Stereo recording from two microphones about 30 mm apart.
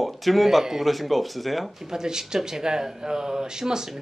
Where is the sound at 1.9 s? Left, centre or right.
Right.